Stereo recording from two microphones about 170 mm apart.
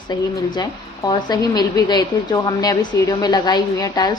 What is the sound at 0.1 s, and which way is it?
A woman's voice, 20° left (ahead or behind).